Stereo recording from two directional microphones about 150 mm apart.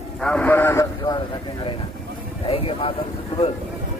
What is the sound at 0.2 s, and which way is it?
Speech, 10° left (ahead or behind).